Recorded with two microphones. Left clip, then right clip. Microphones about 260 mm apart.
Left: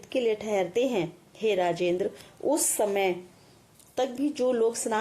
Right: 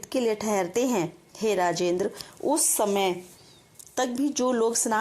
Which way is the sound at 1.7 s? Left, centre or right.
Centre.